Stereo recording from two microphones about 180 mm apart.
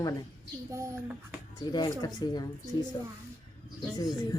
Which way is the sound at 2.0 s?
20° left (ahead or behind).